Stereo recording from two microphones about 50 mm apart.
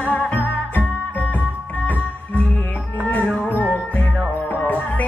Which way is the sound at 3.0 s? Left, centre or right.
Left.